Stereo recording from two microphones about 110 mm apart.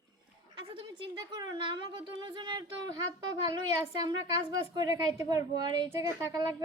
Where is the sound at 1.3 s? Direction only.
45° right (ahead or behind).